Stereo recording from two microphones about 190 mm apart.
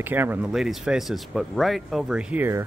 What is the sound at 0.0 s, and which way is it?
Speech, 10° right (ahead or behind).